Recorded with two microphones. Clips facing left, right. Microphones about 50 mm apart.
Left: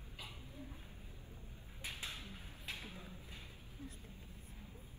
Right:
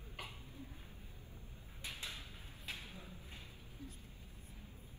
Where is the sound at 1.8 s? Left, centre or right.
Left.